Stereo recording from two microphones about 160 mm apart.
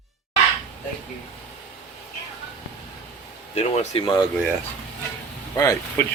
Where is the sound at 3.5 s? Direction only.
40° left (ahead or behind).